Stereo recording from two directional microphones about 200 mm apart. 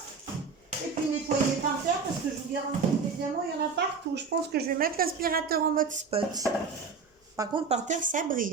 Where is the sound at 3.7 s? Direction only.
55° right (ahead or behind).